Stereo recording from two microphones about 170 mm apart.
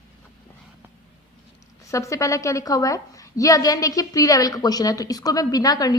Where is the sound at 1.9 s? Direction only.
20° left (ahead or behind).